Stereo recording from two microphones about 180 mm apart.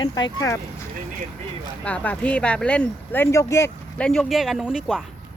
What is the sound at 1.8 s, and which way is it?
Speech, 5° left (ahead or behind).